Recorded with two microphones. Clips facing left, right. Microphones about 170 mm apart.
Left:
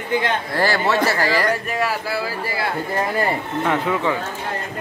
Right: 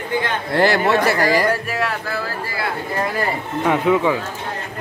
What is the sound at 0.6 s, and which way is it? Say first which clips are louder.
Speech: right 5 dB; 20° right (ahead or behind).